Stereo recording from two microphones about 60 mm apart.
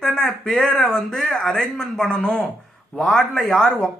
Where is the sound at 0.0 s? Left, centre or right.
Centre.